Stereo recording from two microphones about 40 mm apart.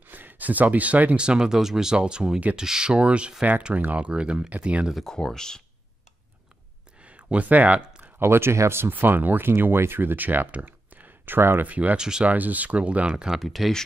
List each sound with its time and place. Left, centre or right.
0.0 s a sound: right
1.1 s speech: right
3.7 s speech: right
4.1 s speech: right
5.0 s speech: centre
7.0 s a sound: right
8.3 s speech: right
9.0 s speech: right
9.5 s speech: right
10.2 s speech: right
11.6 s speech: right
12.0 s speech: centre
12.3 s speech: right
13.4 s speech: centre